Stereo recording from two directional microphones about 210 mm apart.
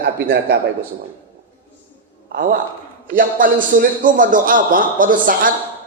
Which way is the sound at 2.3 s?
45° right (ahead or behind).